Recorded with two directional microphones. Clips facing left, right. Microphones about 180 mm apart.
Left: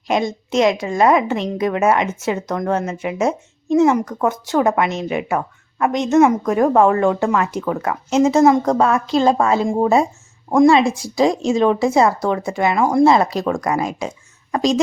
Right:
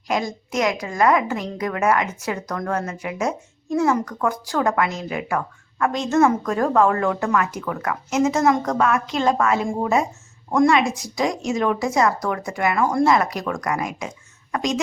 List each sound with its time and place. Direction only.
0.1 s a woman's voice: 25° left (ahead or behind)